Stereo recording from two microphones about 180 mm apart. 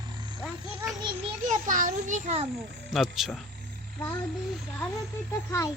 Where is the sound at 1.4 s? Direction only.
45° right (ahead or behind).